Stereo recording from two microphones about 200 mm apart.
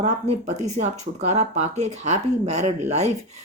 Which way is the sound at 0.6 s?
35° right (ahead or behind).